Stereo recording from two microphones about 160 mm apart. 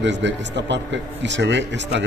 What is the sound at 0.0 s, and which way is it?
A man's voice, 90° right.